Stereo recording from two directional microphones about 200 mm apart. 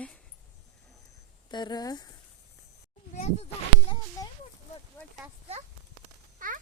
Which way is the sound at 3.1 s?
35° left (ahead or behind).